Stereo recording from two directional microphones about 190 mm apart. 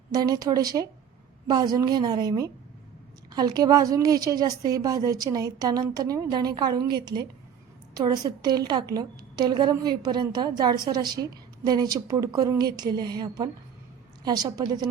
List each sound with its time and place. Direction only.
0.1 s a woman's voice: 20° right (ahead or behind)